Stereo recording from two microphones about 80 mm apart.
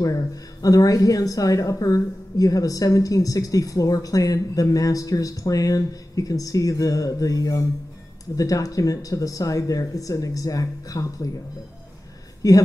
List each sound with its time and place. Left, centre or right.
0.0 s speech: left
12.4 s speech: left